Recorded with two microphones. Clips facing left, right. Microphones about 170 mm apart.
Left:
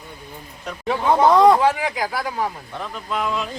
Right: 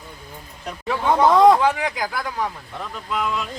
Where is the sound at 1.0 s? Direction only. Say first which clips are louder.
Even; centre (ahead or behind).